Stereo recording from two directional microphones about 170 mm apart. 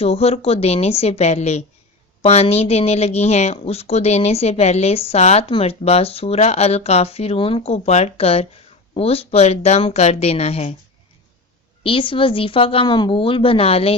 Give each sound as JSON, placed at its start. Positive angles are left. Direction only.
{"t": 0.0, "sound": "speech", "side_deg": 35}
{"t": 11.8, "sound": "speech", "side_deg": 30}